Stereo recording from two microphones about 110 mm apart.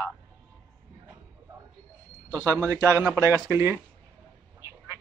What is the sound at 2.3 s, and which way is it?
Speech, 30° right (ahead or behind).